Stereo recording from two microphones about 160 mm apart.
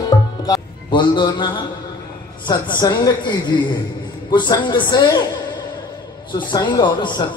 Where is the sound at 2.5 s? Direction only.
25° left (ahead or behind).